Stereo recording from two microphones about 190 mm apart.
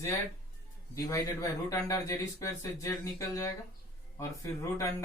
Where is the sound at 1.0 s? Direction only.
15° left (ahead or behind).